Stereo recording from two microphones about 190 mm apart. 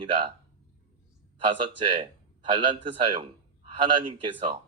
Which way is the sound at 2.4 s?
25° right (ahead or behind).